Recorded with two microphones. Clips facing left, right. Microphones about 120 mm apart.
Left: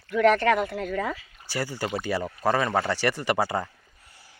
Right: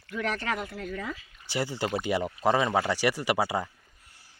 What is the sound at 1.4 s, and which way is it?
Speech, 20° right (ahead or behind).